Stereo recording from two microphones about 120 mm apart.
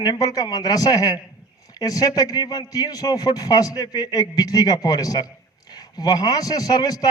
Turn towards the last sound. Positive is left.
turn(degrees=30)  # may be behind; listen again after turning